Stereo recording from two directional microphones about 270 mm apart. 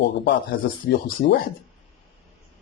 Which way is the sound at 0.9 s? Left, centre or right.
Left.